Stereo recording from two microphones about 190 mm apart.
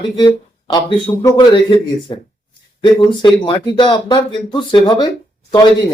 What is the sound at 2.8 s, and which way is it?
Speech, 25° left (ahead or behind).